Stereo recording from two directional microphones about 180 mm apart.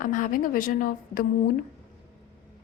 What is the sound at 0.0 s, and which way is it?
A woman's voice, 45° left (ahead or behind).